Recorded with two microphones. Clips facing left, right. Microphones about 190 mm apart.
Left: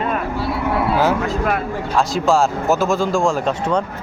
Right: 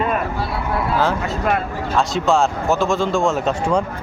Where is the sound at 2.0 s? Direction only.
Centre (ahead or behind).